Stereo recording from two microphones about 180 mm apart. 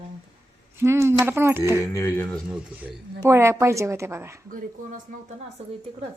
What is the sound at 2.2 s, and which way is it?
Speech, 5° left (ahead or behind).